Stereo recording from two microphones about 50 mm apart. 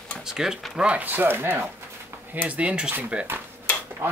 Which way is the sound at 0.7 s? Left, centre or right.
Right.